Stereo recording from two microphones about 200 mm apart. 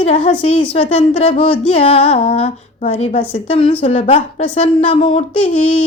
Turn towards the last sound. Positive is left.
turn(degrees=30)  # may be behind; listen again after turning